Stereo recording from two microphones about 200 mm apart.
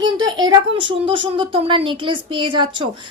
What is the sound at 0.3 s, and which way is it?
A woman's voice, 20° right (ahead or behind).